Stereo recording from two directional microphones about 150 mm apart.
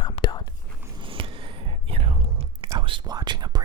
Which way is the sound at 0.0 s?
30° left (ahead or behind).